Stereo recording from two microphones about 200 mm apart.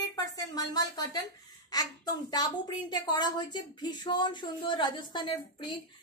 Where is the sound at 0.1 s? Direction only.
20° left (ahead or behind).